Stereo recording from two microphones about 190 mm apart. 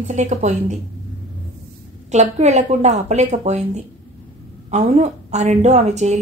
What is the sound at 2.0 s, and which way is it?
A woman's voice, 35° right (ahead or behind).